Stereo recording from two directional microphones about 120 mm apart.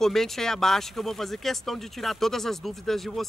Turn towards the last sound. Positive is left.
turn(degrees=0)  # may be behind; listen again after turning